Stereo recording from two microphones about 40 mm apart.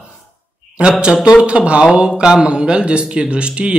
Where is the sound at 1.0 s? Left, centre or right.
Right.